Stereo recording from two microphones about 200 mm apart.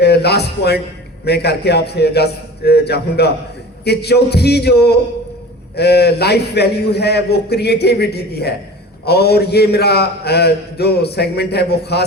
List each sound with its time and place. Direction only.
0.0 s a man's voice: 55° left (ahead or behind)